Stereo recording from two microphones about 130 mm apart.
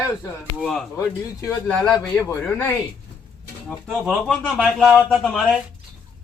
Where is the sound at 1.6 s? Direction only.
10° left (ahead or behind).